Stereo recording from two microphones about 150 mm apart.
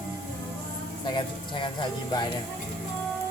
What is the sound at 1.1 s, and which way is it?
Speech, 35° left (ahead or behind).